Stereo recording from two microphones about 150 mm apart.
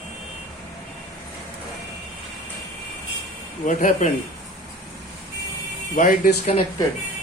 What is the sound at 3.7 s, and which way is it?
Speech, 60° left (ahead or behind).